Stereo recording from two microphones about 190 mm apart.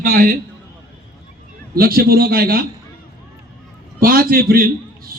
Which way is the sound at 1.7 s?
50° right (ahead or behind).